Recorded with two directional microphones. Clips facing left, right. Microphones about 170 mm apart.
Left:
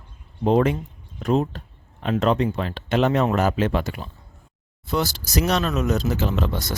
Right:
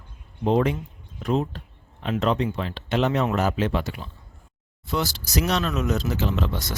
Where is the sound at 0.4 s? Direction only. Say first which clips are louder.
Left 3 dB; 45° left (ahead or behind).